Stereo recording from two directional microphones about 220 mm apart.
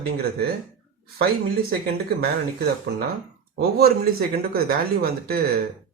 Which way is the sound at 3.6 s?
45° right (ahead or behind).